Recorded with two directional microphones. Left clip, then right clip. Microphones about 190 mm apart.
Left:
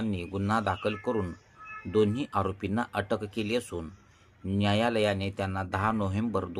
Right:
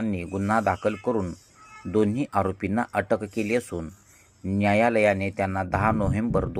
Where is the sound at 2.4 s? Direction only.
15° right (ahead or behind).